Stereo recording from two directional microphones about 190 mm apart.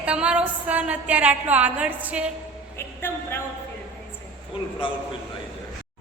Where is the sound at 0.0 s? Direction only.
5° right (ahead or behind).